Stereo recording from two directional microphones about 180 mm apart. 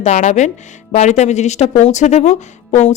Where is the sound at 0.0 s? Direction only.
40° left (ahead or behind).